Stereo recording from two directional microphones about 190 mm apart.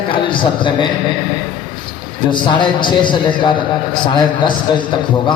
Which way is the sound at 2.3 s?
25° left (ahead or behind).